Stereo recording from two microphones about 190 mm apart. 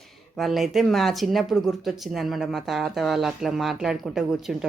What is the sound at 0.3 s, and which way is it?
Speech, centre (ahead or behind).